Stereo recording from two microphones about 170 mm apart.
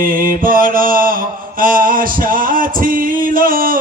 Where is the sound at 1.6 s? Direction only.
55° right (ahead or behind).